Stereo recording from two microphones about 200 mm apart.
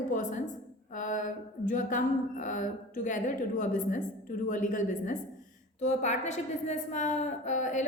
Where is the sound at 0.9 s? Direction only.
40° left (ahead or behind).